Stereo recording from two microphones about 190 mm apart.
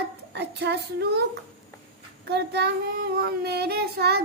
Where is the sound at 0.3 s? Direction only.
60° right (ahead or behind).